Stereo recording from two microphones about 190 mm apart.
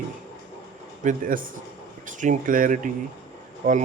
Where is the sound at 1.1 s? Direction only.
45° right (ahead or behind).